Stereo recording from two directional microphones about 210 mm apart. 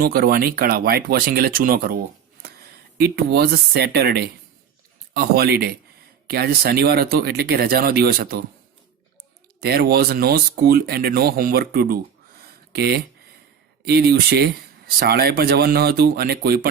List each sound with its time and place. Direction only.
0.0 s speech: 45° right (ahead or behind)
3.0 s speech: 50° right (ahead or behind)
9.6 s speech: 50° right (ahead or behind)
12.5 s a sound: 50° right (ahead or behind)
13.8 s speech: 50° right (ahead or behind)